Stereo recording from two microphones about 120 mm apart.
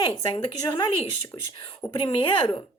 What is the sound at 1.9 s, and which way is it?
Speech, 45° left (ahead or behind).